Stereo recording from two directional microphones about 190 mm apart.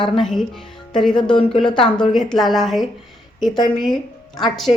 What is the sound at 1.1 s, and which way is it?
Speech, 25° left (ahead or behind).